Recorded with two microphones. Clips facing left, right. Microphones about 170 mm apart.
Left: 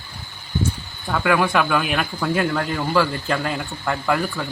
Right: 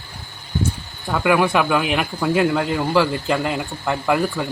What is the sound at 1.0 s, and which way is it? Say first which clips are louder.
Speech: right 2 dB; 10° right (ahead or behind).